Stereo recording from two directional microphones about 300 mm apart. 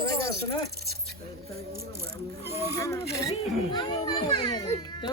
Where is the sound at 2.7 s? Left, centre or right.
Centre.